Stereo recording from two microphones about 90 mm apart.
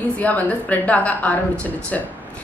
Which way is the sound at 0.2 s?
15° left (ahead or behind).